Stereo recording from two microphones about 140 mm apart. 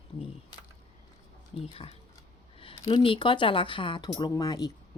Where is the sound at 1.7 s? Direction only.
45° left (ahead or behind).